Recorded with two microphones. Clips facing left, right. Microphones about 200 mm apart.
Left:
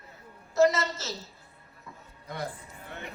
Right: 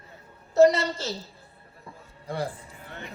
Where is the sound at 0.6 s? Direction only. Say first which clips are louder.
Right 5 dB; 30° right (ahead or behind).